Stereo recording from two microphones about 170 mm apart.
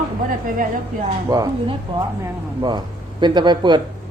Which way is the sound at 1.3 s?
20° right (ahead or behind).